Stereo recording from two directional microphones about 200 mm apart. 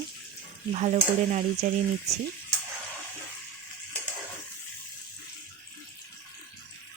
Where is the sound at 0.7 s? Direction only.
35° right (ahead or behind).